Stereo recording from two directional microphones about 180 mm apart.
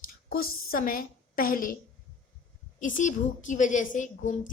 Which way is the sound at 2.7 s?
45° left (ahead or behind).